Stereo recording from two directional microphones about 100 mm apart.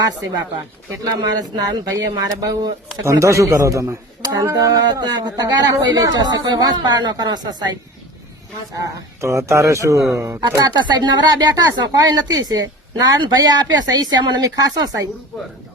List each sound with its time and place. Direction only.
1.2 s speech: 40° right (ahead or behind)
10.6 s speech: 45° right (ahead or behind)